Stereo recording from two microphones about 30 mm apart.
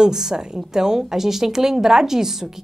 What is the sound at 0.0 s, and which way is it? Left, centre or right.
Speech, centre.